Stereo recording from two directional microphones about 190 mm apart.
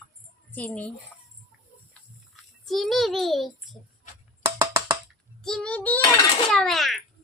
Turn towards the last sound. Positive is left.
turn(degrees=0)  # may be behind; listen again after turning